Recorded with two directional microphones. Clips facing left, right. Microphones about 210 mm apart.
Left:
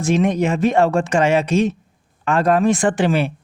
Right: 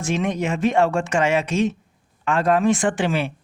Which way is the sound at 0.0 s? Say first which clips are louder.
Left 6 dB; 40° left (ahead or behind).